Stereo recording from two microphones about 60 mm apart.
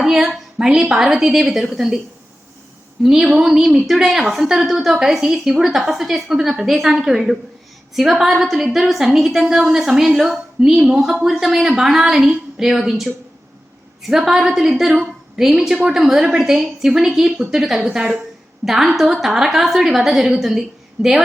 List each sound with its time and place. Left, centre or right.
0.0 s a sound: centre
0.6 s speech: centre
3.0 s a woman's voice: centre